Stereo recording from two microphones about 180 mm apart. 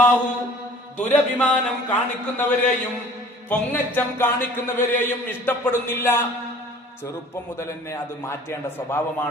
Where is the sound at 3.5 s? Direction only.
10° left (ahead or behind).